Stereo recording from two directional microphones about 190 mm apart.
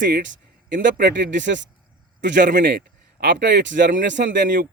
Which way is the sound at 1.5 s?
70° right (ahead or behind).